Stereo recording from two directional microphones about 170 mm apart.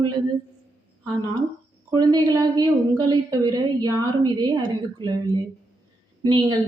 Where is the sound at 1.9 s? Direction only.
25° right (ahead or behind).